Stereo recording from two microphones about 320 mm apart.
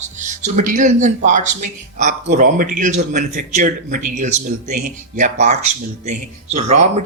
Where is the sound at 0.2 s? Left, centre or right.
Right.